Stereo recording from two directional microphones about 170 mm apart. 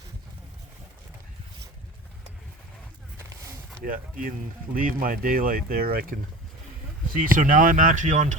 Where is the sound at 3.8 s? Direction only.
55° right (ahead or behind).